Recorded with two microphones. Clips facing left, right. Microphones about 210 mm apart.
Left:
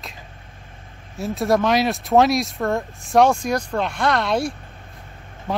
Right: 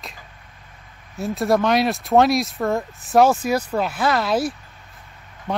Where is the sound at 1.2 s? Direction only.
Centre (ahead or behind).